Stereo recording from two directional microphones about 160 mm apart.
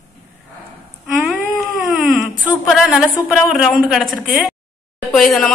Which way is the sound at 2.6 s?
Centre (ahead or behind).